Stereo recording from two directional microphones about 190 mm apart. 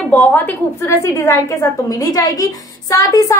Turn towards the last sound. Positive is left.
turn(degrees=20)  # may be behind; listen again after turning